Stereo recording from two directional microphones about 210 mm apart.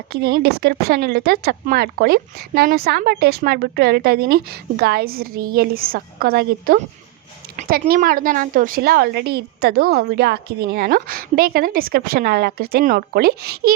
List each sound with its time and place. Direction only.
0.1 s speech: 50° right (ahead or behind)